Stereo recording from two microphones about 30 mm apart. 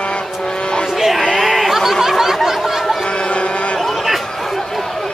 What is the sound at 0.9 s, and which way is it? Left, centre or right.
Music, centre.